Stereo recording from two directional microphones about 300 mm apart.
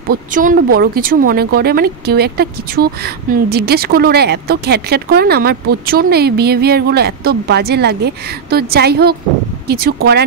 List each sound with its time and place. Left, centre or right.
0.1 s speech: right